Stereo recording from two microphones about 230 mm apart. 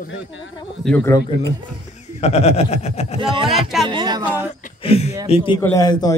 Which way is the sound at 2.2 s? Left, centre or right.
Left.